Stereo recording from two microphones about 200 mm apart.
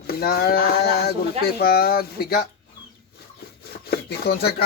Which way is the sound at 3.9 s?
55° left (ahead or behind).